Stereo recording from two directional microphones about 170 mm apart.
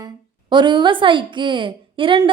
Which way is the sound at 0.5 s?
25° right (ahead or behind).